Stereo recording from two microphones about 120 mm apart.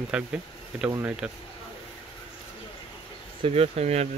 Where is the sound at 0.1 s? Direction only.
10° right (ahead or behind).